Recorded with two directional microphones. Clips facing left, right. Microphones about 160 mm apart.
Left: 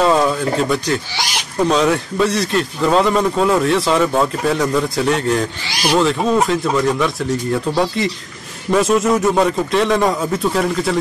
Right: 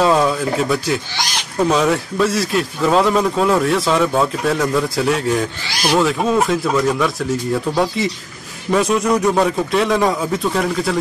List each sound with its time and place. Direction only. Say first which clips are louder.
0.0 s a man's voice: even; centre (ahead or behind)